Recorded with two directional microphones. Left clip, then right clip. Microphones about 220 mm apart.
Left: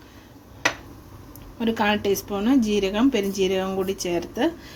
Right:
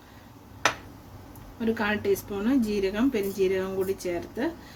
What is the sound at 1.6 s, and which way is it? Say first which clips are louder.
A woman's voice: left 5 dB; 35° left (ahead or behind).